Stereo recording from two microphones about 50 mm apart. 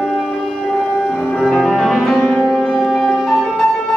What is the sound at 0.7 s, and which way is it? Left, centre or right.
Music, centre.